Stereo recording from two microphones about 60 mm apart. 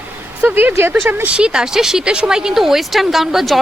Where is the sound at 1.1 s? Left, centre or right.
Right.